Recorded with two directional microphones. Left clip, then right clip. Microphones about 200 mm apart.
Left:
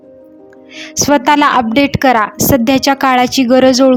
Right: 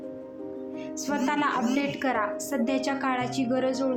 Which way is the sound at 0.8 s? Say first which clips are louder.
Left 19 dB; 50° left (ahead or behind).